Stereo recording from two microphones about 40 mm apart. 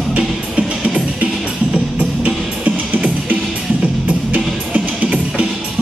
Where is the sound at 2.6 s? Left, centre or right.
Right.